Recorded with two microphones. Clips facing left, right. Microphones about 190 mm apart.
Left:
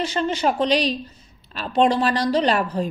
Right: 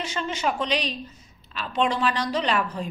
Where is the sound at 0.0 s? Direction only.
35° left (ahead or behind).